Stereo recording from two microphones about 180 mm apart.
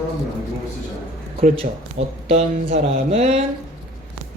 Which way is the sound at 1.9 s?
35° right (ahead or behind).